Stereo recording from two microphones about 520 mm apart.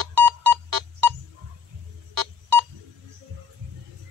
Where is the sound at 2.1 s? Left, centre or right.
Right.